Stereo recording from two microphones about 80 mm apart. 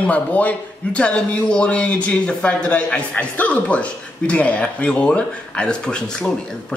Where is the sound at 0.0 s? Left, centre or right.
Centre.